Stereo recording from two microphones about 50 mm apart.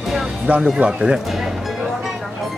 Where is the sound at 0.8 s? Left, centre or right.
Right.